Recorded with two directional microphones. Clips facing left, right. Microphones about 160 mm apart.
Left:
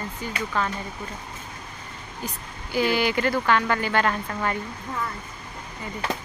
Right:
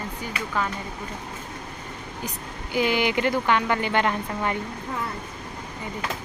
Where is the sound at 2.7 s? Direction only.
20° right (ahead or behind).